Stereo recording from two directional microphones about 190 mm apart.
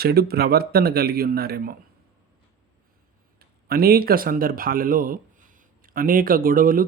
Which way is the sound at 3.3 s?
50° right (ahead or behind).